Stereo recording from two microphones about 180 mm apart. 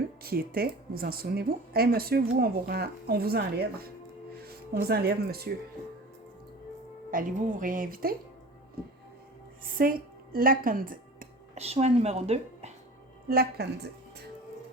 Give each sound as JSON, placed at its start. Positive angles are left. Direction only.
{"t": 0.2, "sound": "speech", "side_deg": -55}
{"t": 7.1, "sound": "speech", "side_deg": -50}
{"t": 9.6, "sound": "a sound", "side_deg": -50}
{"t": 11.6, "sound": "a woman's voice", "side_deg": -35}
{"t": 13.2, "sound": "speech", "side_deg": -60}